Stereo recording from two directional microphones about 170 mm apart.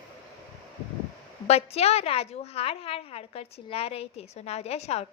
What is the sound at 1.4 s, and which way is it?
A woman's voice, 40° left (ahead or behind).